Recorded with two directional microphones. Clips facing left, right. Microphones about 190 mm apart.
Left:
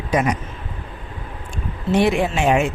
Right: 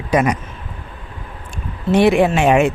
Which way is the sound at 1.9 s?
65° right (ahead or behind).